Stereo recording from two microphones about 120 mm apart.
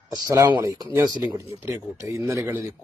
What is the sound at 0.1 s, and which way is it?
A man's voice, 30° right (ahead or behind).